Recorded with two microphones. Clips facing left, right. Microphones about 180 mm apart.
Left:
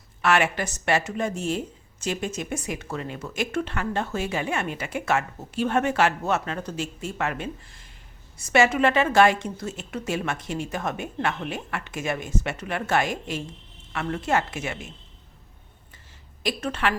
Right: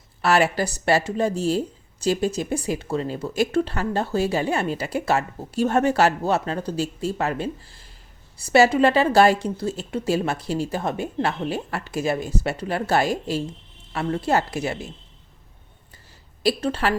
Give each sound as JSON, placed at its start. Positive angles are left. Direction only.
{"t": 0.2, "sound": "speech", "side_deg": -35}
{"t": 16.4, "sound": "speech", "side_deg": -35}